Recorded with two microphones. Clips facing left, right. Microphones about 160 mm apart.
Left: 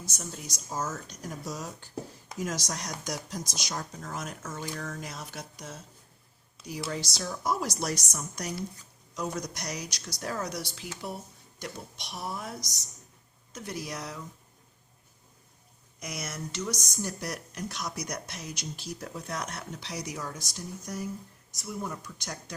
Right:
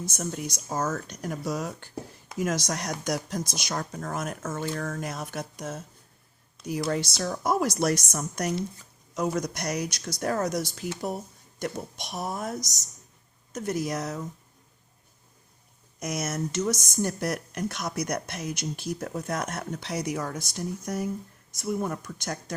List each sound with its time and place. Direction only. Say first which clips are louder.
0.0 s a woman's voice: right 8 dB; 55° right (ahead or behind)
16.0 s speech: right 8 dB; 45° right (ahead or behind)